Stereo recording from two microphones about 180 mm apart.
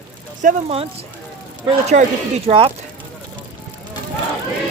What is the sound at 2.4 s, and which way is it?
Speech, 35° right (ahead or behind).